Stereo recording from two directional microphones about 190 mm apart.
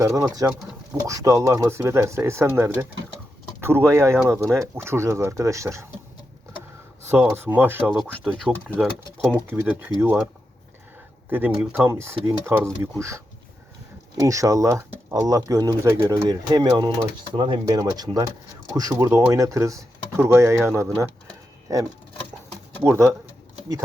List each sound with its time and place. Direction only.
0.0 s speech: 15° right (ahead or behind)
3.8 s speech: 15° right (ahead or behind)
7.3 s speech: 10° right (ahead or behind)
11.3 s speech: 10° right (ahead or behind)
22.9 s speech: 15° right (ahead or behind)